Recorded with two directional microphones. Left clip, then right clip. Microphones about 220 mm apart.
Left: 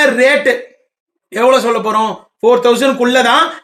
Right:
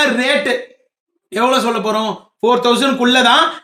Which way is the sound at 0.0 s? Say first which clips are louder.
Left 5 dB; 15° right (ahead or behind).